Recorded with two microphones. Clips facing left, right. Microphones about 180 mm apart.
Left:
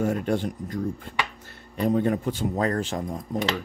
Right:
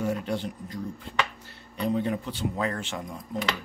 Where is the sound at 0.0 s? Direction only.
50° left (ahead or behind).